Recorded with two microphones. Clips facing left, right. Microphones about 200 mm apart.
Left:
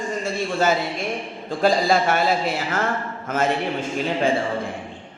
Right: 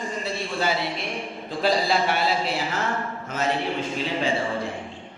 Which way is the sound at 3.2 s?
50° left (ahead or behind).